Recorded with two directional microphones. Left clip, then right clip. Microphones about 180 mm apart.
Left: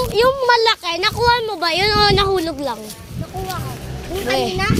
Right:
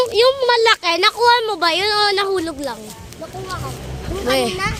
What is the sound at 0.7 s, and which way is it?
Speech, 25° right (ahead or behind).